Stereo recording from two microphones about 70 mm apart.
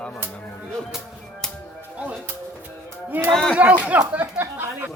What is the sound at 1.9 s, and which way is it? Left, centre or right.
Music, centre.